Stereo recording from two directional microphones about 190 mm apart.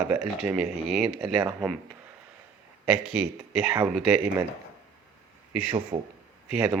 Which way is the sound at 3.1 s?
5° right (ahead or behind).